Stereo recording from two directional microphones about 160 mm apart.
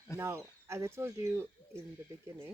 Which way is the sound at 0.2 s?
20° right (ahead or behind).